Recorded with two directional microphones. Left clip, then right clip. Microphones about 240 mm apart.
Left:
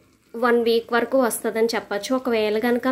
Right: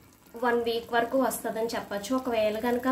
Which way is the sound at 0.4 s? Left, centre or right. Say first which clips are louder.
Left 8 dB; left.